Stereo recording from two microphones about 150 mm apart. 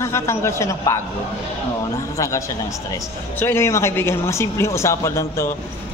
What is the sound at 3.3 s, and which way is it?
Speech, 15° left (ahead or behind).